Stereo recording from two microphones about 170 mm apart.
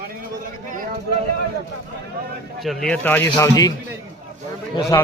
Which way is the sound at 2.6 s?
5° left (ahead or behind).